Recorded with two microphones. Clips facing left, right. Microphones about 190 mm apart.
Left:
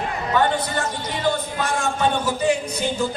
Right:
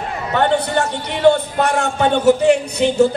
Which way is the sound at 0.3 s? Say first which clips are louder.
Right 5 dB; 70° right (ahead or behind).